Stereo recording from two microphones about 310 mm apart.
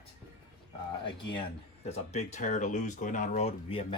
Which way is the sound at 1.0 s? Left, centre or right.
Centre.